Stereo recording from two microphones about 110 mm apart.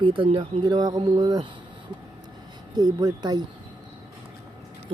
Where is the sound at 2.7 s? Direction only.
35° right (ahead or behind).